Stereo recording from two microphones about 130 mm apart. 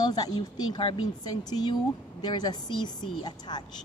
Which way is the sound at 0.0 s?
30° left (ahead or behind).